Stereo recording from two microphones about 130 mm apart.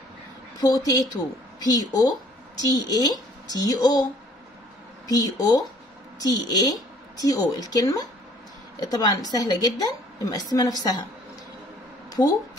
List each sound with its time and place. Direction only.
0.6 s a woman's voice: 30° left (ahead or behind)
5.0 s a woman's voice: 30° left (ahead or behind)